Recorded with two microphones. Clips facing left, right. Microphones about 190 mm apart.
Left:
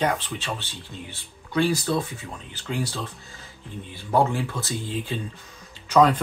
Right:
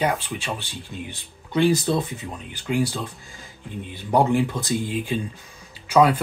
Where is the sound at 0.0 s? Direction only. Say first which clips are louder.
Right 1 dB; 10° right (ahead or behind).